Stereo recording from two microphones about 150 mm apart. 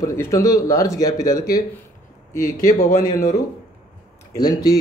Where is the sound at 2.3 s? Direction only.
60° left (ahead or behind).